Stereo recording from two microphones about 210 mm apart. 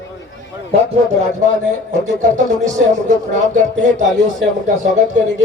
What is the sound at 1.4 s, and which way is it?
A man's voice, 35° right (ahead or behind).